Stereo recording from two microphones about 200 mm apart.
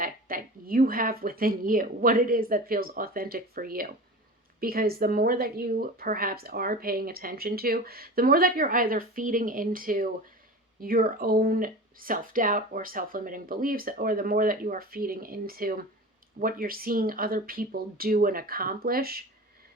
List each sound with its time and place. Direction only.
0.0 s speech: 45° right (ahead or behind)